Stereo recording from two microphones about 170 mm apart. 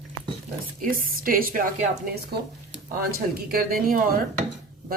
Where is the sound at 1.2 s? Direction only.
55° right (ahead or behind).